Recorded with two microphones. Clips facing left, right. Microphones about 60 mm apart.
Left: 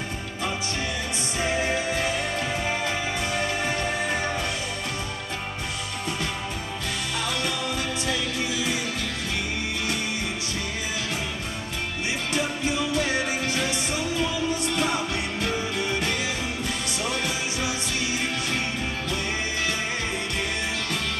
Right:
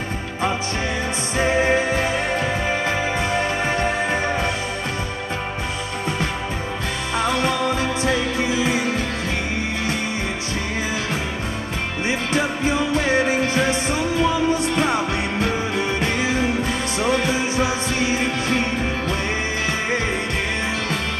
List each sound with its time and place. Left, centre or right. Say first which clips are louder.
1.4 s music: right 7 dB; right
3.3 s music: right 5 dB; right
7.2 s music: right 10 dB; right
12.3 s music: right 5 dB; right